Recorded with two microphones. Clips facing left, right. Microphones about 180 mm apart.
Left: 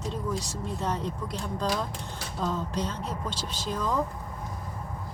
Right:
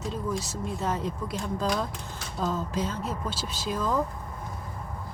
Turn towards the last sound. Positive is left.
turn(degrees=-5)  # may be behind; listen again after turning